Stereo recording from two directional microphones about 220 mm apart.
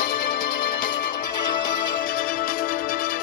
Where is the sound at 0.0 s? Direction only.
40° left (ahead or behind).